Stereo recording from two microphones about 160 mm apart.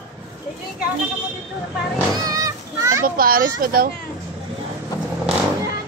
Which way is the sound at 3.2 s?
65° right (ahead or behind).